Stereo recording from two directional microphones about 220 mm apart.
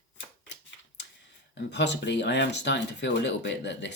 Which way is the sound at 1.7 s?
50° left (ahead or behind).